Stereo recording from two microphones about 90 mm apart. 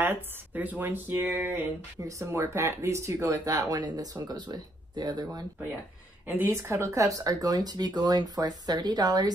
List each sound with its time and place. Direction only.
0.0 s speech: 20° right (ahead or behind)
2.0 s speech: 35° right (ahead or behind)
6.2 s speech: 25° right (ahead or behind); by 9.3 s 45° right (ahead or behind)